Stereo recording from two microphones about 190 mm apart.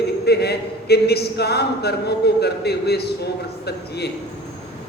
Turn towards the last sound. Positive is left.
turn(degrees=60)  # may be behind; listen again after turning